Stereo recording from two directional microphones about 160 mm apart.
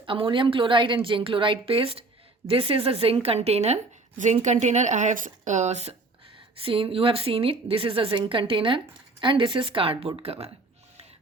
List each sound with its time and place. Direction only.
0.0 s a woman's voice: 30° right (ahead or behind)